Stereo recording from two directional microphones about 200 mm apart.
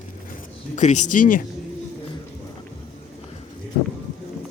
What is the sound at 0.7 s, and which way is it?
Speech, 40° left (ahead or behind).